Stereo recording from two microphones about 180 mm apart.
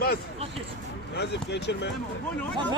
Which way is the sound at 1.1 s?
75° left (ahead or behind).